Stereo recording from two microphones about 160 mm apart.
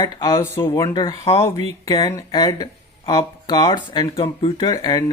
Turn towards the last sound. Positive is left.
turn(degrees=20)  # may be behind; listen again after turning